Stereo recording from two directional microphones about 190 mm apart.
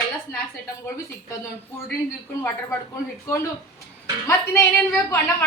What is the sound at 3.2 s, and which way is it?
Speech, 15° left (ahead or behind).